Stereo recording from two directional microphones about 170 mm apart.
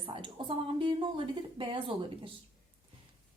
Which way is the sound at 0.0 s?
30° right (ahead or behind).